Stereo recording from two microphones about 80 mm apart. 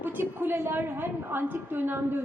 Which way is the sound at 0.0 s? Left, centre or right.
Right.